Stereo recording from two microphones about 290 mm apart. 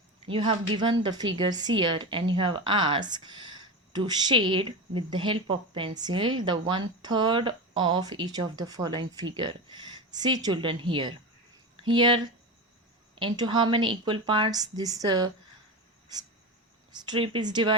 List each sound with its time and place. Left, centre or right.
0.3 s speech: centre
16.9 s speech: centre